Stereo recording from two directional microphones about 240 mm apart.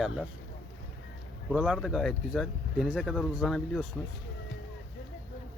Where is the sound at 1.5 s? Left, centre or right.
Centre.